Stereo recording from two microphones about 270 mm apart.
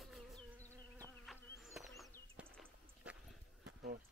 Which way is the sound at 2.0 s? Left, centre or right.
Centre.